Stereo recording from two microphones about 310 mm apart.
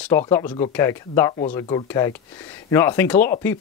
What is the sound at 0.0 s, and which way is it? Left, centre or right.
Speech, centre.